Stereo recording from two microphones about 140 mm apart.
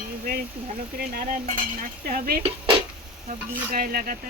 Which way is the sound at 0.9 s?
90° right.